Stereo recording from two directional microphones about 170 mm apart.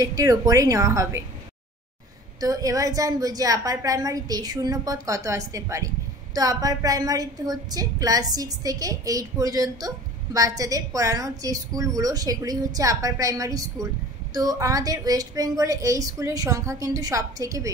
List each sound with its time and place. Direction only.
0.0 s a woman's voice: 20° right (ahead or behind)
2.4 s a woman's voice: 20° right (ahead or behind)